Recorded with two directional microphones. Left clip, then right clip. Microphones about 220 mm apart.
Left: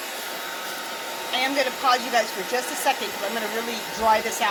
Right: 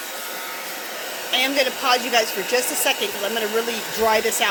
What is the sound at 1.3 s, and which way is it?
Speech, 40° right (ahead or behind).